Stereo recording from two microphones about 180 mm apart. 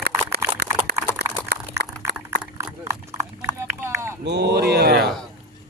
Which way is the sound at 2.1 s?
10° right (ahead or behind).